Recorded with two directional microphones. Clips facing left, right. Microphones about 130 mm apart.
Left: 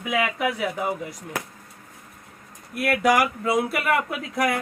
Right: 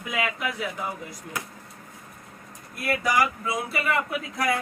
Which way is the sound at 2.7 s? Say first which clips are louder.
Left 5 dB; 75° left (ahead or behind).